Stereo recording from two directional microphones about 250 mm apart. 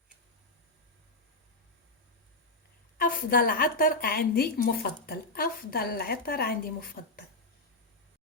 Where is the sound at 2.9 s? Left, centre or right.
Left.